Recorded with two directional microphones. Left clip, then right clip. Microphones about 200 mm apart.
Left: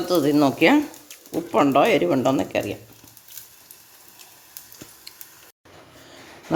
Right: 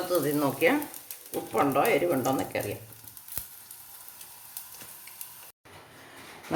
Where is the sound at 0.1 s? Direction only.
45° left (ahead or behind).